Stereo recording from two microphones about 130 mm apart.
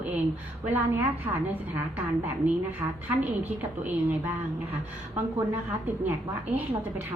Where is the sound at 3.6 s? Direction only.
15° right (ahead or behind).